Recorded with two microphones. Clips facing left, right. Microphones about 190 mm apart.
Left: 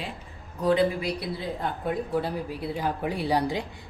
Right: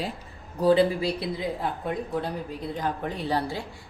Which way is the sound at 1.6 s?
Centre (ahead or behind).